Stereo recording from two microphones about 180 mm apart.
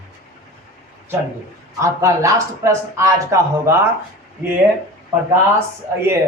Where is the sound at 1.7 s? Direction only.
15° right (ahead or behind).